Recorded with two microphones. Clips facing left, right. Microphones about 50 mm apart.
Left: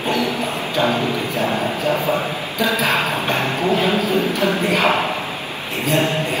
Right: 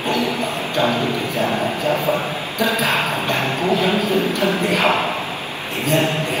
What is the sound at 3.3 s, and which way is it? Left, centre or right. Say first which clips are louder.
Vehicle: even; left.